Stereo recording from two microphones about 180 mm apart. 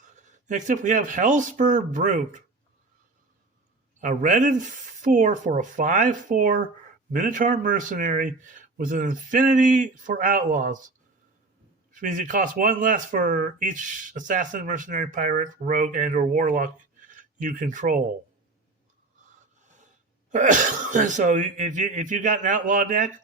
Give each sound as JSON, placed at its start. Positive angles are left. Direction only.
{"t": 0.0, "sound": "speech", "side_deg": -40}
{"t": 4.0, "sound": "speech", "side_deg": -45}
{"t": 20.3, "sound": "speech", "side_deg": -45}